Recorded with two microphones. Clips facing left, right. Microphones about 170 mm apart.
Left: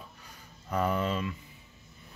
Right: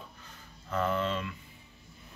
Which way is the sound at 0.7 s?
10° left (ahead or behind).